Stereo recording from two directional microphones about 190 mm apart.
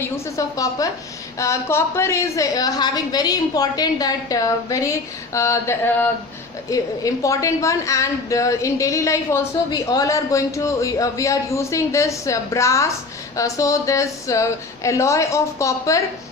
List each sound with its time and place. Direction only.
0.0 s a woman's voice: 15° left (ahead or behind)